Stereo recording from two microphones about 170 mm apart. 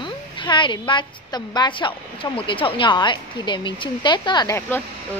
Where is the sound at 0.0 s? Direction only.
30° left (ahead or behind).